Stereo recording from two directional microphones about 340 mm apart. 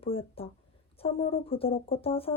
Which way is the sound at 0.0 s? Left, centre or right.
Centre.